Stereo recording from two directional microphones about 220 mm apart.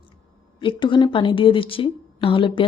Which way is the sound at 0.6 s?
20° left (ahead or behind).